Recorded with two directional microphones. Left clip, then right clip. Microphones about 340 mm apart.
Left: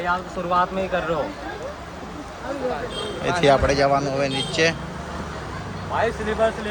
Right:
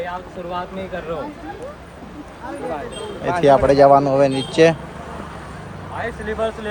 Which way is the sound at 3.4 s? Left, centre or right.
Centre.